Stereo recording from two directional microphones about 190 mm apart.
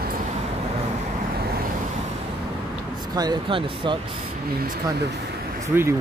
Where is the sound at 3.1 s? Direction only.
25° right (ahead or behind).